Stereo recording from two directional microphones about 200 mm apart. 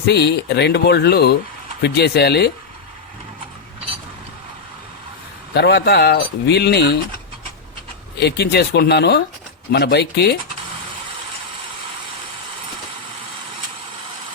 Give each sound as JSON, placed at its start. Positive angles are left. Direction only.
{"t": 0.0, "sound": "speech", "side_deg": 55}
{"t": 5.5, "sound": "speech", "side_deg": 55}
{"t": 8.2, "sound": "speech", "side_deg": 55}